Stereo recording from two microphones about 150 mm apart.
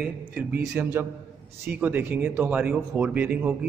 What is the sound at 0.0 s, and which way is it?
A man's voice, 5° right (ahead or behind).